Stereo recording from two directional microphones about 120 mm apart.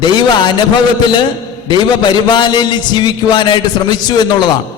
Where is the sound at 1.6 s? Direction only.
35° left (ahead or behind).